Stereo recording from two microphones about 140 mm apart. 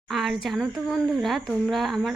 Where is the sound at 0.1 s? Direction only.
Centre (ahead or behind).